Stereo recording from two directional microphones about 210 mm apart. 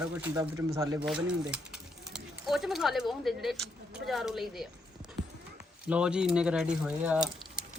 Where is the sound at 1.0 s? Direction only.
5° right (ahead or behind).